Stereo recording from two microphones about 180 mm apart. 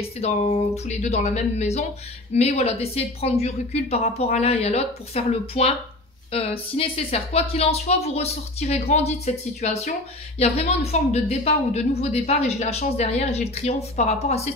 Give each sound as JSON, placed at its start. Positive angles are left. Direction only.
{"t": 0.0, "sound": "a woman's voice", "side_deg": 35}